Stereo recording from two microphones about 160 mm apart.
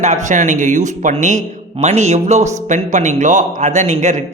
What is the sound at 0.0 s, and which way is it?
A man's voice, 50° right (ahead or behind).